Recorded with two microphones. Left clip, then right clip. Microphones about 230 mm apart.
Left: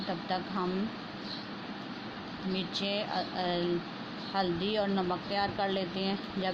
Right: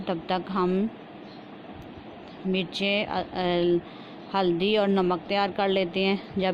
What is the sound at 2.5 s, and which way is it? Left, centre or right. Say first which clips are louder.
A woman's voice: right 7 dB; right.